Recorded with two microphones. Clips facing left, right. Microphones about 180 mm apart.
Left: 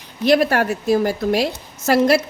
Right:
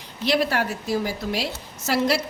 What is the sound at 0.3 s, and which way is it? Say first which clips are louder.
A woman's voice: left 7 dB; 50° left (ahead or behind).